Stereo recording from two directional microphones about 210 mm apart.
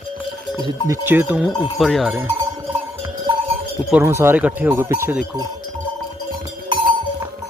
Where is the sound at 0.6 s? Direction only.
15° right (ahead or behind).